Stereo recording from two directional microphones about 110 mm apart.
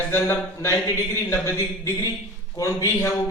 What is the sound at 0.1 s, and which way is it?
A man's voice, 25° left (ahead or behind).